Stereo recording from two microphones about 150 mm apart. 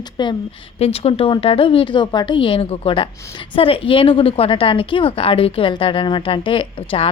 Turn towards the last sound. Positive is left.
turn(degrees=35)  # may be behind; listen again after turning